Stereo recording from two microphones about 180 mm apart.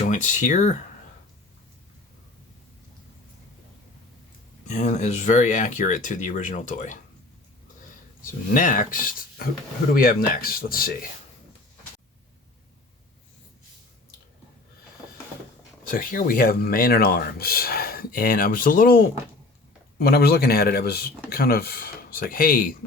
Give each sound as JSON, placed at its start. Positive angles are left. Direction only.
{"t": 0.0, "sound": "speech", "side_deg": 45}
{"t": 4.7, "sound": "speech", "side_deg": 40}
{"t": 8.2, "sound": "speech", "side_deg": 50}
{"t": 15.8, "sound": "speech", "side_deg": 50}